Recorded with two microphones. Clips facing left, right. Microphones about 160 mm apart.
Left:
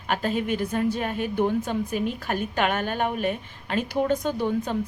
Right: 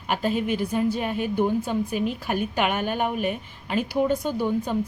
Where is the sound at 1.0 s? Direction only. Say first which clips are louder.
Right 1 dB; 45° left (ahead or behind).